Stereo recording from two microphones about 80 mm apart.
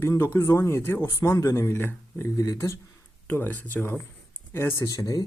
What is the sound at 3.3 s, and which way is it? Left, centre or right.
Speech, left.